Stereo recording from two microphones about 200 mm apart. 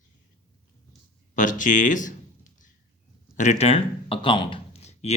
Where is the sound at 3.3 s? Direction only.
35° left (ahead or behind).